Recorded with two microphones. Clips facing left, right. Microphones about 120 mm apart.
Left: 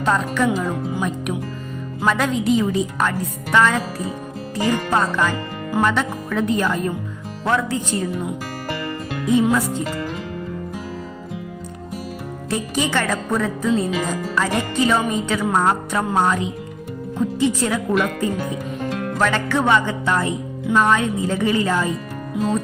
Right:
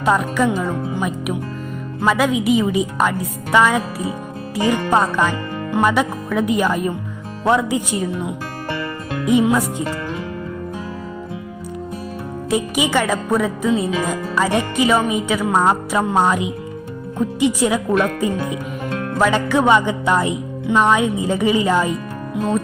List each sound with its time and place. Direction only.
0.0 s a woman's voice: 10° right (ahead or behind)
0.4 s speech: 5° left (ahead or behind)
2.0 s a woman's voice: 5° right (ahead or behind)
9.3 s a woman's voice: 15° right (ahead or behind)
12.5 s a woman's voice: 15° right (ahead or behind)
19.2 s a woman's voice: 15° right (ahead or behind)